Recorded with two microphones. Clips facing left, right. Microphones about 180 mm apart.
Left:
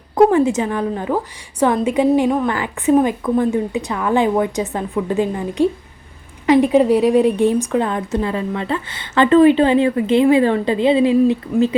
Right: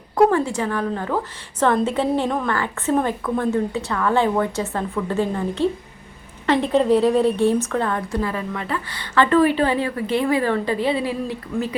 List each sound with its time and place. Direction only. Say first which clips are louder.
0.2 s a woman's voice: left 4 dB; 20° left (ahead or behind)